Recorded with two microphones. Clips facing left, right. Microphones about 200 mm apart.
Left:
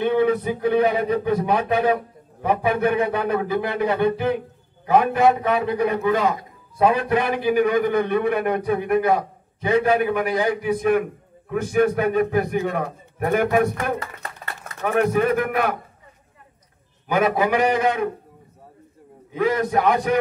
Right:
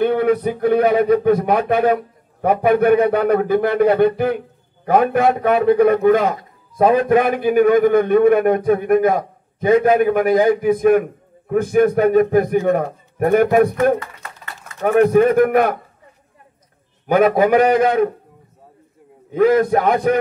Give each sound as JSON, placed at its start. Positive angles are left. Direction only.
{"t": 0.0, "sound": "a man's voice", "side_deg": -50}
{"t": 3.1, "sound": "a man's voice", "side_deg": -50}
{"t": 6.8, "sound": "a man's voice", "side_deg": -40}
{"t": 7.2, "sound": "a man's voice", "side_deg": -50}
{"t": 17.1, "sound": "a man's voice", "side_deg": -50}
{"t": 19.3, "sound": "a man's voice", "side_deg": -50}